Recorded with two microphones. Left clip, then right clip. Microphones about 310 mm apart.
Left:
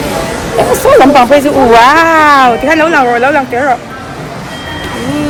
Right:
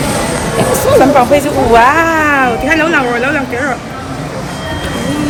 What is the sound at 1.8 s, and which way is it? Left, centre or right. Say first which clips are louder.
Speech: left 4 dB; left.